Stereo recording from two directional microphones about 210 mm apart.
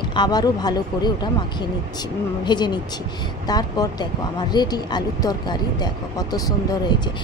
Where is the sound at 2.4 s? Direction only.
20° left (ahead or behind).